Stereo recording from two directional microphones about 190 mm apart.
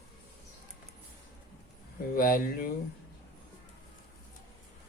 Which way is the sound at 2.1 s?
50° left (ahead or behind).